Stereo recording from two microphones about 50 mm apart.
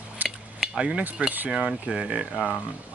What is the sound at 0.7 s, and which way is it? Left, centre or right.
Speech, centre.